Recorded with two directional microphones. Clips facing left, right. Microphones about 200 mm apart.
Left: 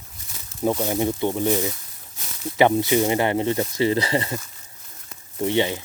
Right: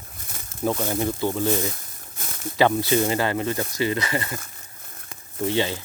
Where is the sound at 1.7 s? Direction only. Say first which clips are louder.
Right 3 dB; 50° right (ahead or behind).